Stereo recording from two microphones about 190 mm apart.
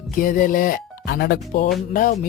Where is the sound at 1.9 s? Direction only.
45° left (ahead or behind).